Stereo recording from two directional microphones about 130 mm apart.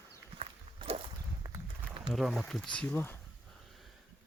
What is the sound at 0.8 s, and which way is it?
Whip, 50° right (ahead or behind).